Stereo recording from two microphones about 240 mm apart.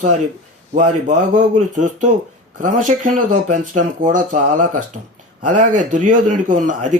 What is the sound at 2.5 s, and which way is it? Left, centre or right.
Speech, right.